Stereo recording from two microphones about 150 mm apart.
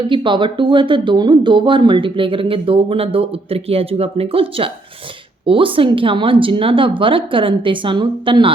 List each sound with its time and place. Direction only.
0.0 s speech: 30° right (ahead or behind)